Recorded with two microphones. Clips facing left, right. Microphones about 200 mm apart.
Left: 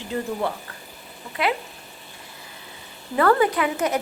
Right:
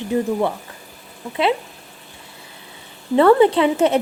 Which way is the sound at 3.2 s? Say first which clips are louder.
Right 6 dB; 25° right (ahead or behind).